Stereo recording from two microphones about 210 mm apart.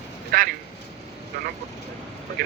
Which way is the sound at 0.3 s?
45° right (ahead or behind).